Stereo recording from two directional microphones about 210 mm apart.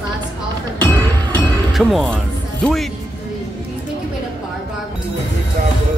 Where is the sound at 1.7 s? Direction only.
Centre (ahead or behind).